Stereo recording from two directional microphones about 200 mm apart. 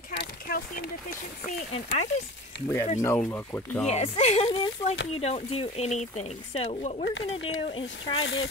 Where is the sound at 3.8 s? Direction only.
30° left (ahead or behind).